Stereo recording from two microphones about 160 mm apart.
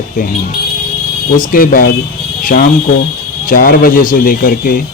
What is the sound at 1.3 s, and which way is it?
Speech, 60° left (ahead or behind).